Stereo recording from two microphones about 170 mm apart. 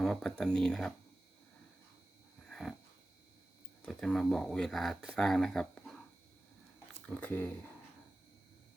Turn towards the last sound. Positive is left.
turn(degrees=10)  # may be behind; listen again after turning